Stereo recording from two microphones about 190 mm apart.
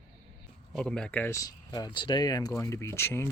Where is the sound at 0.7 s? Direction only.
5° left (ahead or behind).